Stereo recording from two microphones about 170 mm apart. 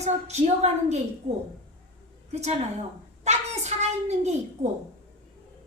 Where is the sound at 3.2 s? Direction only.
40° right (ahead or behind).